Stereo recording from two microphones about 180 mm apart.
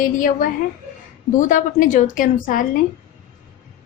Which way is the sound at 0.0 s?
50° left (ahead or behind).